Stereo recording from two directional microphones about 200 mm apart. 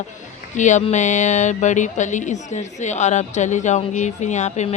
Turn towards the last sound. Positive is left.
turn(degrees=35)  # may be behind; listen again after turning